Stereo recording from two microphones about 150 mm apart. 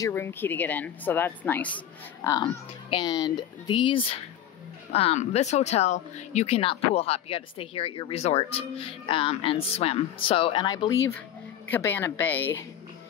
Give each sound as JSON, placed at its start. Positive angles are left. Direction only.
{"t": 0.0, "sound": "a woman's voice", "side_deg": 15}
{"t": 2.4, "sound": "a woman's voice", "side_deg": 35}